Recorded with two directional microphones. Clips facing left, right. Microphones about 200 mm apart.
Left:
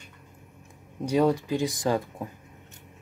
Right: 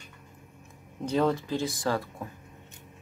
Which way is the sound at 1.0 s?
15° left (ahead or behind).